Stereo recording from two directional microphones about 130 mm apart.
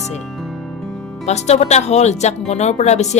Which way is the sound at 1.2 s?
60° left (ahead or behind).